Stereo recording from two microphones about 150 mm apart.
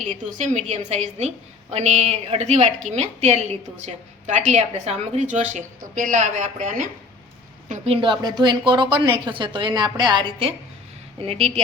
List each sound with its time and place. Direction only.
0.0 s a woman's voice: 55° right (ahead or behind)
8.0 s a woman's voice: 30° right (ahead or behind)